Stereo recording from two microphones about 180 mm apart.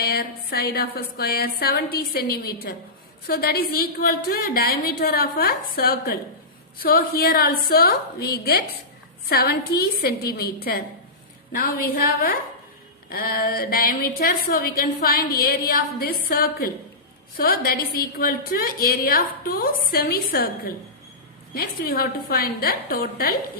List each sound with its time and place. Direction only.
0.0 s a woman's voice: 60° left (ahead or behind)
21.5 s a woman's voice: 55° left (ahead or behind)